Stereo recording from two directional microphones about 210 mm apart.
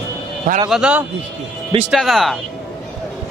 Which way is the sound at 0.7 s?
5° right (ahead or behind).